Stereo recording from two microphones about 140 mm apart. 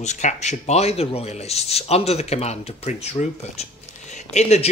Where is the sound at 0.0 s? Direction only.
55° left (ahead or behind).